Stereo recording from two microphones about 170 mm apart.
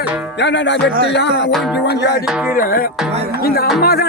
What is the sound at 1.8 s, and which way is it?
Music, 80° left.